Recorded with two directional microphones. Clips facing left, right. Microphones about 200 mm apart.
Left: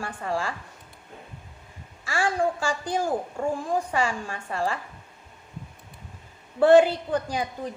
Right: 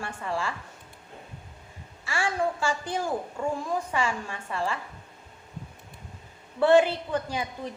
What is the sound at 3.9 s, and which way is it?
Speech, 35° left (ahead or behind).